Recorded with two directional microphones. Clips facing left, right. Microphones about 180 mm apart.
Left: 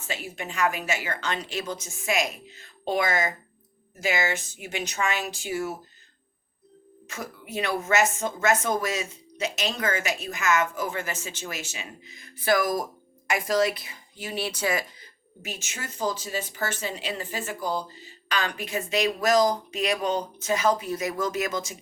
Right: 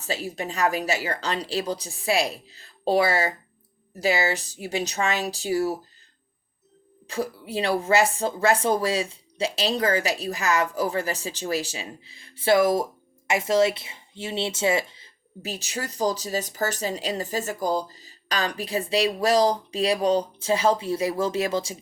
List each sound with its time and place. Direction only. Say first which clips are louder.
0.0 s speech: right 5 dB; 35° right (ahead or behind)
7.1 s speech: right 7 dB; 30° right (ahead or behind)